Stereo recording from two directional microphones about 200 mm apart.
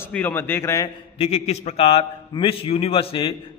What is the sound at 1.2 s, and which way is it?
A man's voice, 30° left (ahead or behind).